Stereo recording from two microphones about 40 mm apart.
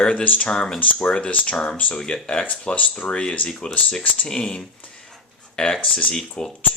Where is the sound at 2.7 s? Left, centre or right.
Left.